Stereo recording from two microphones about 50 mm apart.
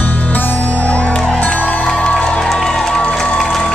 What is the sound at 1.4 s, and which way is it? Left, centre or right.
Music, left.